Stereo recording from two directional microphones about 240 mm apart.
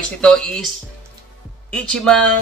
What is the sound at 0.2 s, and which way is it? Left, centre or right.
Speech, centre.